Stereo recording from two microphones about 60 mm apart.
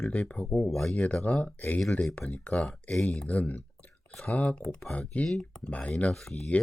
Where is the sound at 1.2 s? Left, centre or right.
Left.